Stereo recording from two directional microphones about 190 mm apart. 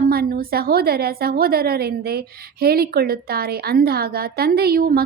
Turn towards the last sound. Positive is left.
turn(degrees=-50)  # may be behind; listen again after turning